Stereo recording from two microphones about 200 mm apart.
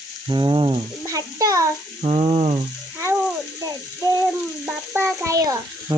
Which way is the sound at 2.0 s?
35° right (ahead or behind).